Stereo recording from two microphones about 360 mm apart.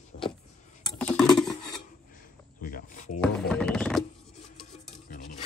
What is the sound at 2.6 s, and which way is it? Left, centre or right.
Speech, left.